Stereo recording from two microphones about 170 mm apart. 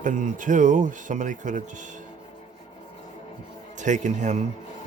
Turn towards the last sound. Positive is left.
turn(degrees=-45)  # may be behind; listen again after turning